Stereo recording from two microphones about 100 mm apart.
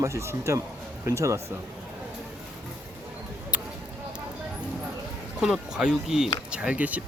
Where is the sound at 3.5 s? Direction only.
15° right (ahead or behind).